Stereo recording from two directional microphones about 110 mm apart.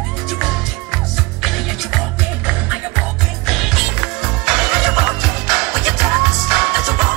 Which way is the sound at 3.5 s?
Centre (ahead or behind).